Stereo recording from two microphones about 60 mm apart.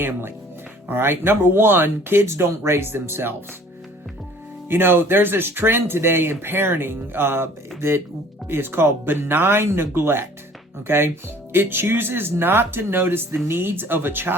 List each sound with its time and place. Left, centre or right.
0.9 s speech: right
4.7 s speech: right